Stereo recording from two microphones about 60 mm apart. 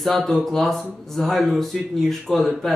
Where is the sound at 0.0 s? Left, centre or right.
Centre.